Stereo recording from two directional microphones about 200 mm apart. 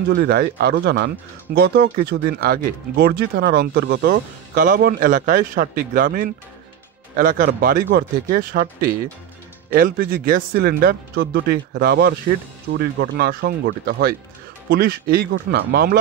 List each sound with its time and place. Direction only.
0.1 s speech: 50° right (ahead or behind)